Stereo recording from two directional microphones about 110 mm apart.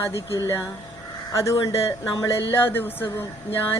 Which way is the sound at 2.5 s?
20° left (ahead or behind).